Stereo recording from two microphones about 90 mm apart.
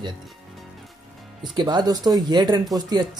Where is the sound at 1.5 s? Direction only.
50° right (ahead or behind).